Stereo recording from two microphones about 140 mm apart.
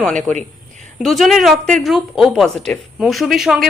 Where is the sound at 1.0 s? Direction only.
Centre (ahead or behind).